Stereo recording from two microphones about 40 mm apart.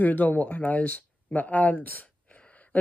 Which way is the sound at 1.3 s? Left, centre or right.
Left.